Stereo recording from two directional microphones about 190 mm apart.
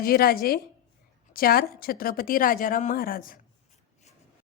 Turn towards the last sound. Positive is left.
turn(degrees=50)  # may be behind; listen again after turning